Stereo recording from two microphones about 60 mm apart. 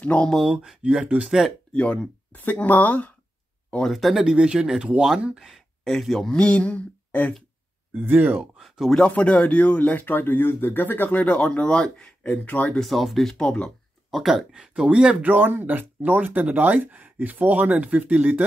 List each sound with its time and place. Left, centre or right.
0.0 s speech: left
0.3 s speech: centre
1.0 s speech: right
1.7 s speech: centre
3.7 s speech: centre
5.3 s speech: centre
6.3 s speech: left
7.9 s speech: right
8.5 s a sound: centre
8.9 s speech: centre
12.8 s speech: centre
14.1 s speech: centre
15.2 s speech: right